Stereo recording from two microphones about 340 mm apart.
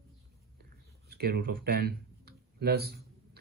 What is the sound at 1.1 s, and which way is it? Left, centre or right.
Speech, right.